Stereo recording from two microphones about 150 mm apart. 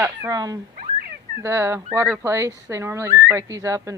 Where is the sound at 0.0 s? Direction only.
20° right (ahead or behind).